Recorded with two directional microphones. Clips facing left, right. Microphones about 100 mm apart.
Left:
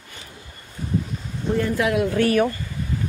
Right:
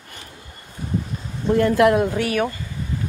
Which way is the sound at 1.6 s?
60° right (ahead or behind).